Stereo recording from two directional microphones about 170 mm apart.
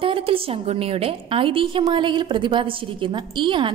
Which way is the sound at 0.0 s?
30° right (ahead or behind).